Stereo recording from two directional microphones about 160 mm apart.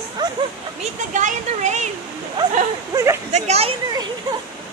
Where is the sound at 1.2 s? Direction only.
50° right (ahead or behind).